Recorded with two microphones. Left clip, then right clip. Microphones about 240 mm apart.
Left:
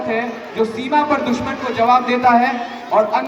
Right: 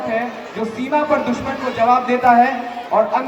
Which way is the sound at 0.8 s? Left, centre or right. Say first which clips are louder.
Right 1 dB; left.